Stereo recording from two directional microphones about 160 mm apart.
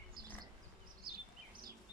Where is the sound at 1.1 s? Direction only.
70° right (ahead or behind).